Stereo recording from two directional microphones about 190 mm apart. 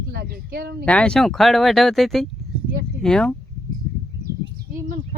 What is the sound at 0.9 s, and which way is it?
Speech, 5° left (ahead or behind).